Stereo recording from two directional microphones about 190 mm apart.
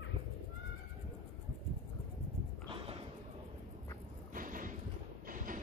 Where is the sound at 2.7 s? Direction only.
25° right (ahead or behind).